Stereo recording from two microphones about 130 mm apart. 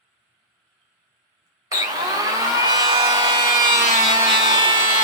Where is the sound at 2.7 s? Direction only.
30° right (ahead or behind).